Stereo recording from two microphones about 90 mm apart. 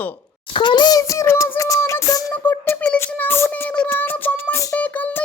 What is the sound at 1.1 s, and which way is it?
Music, 35° left (ahead or behind).